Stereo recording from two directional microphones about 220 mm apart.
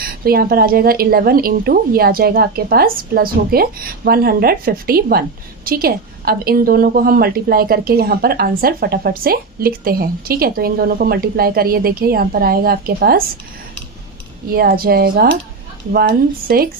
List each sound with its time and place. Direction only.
0.0 s a woman's voice: 45° right (ahead or behind)
14.5 s a woman's voice: 45° right (ahead or behind)